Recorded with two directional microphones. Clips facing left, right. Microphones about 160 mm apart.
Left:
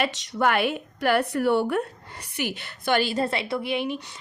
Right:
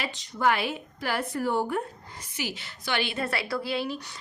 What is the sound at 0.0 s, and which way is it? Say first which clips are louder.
A woman's voice: left 3 dB; 75° left (ahead or behind).